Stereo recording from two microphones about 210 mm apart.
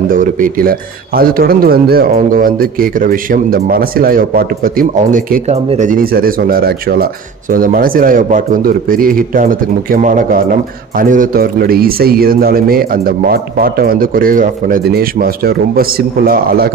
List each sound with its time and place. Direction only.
0.1 s a man's voice: 40° right (ahead or behind)